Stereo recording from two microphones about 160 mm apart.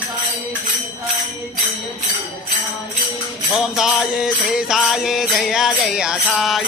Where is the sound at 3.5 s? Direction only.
Centre (ahead or behind).